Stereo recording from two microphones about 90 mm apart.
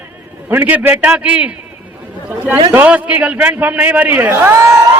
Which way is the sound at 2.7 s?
15° right (ahead or behind).